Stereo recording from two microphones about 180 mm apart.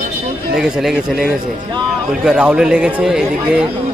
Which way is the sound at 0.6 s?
Centre (ahead or behind).